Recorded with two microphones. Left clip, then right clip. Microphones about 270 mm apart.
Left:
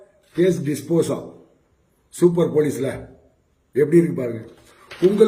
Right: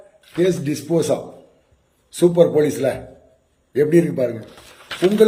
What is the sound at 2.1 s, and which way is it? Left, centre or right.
Speech, centre.